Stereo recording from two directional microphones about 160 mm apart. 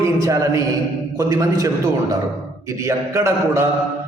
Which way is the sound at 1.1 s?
20° right (ahead or behind).